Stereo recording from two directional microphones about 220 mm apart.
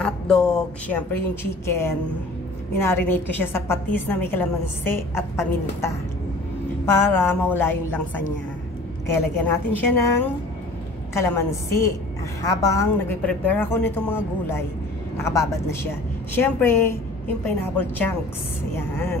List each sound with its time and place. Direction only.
0.0 s a woman's voice: 5° left (ahead or behind)
7.1 s a woman's voice: 10° left (ahead or behind)
9.0 s a woman's voice: 10° left (ahead or behind)
11.1 s a woman's voice: 10° left (ahead or behind)